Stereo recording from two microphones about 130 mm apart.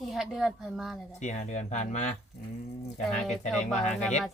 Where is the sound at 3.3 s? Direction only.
60° left (ahead or behind).